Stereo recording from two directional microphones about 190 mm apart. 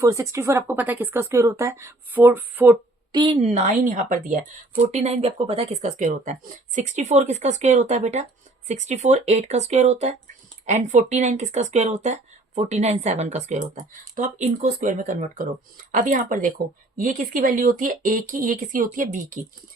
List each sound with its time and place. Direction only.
0.0 s speech: 15° right (ahead or behind)
3.1 s a woman's voice: 20° right (ahead or behind)
3.4 s speech: 35° right (ahead or behind)
4.9 s speech: 35° right (ahead or behind)